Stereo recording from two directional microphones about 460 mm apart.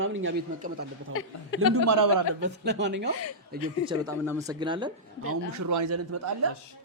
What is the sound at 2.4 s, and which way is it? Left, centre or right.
A man's voice, right.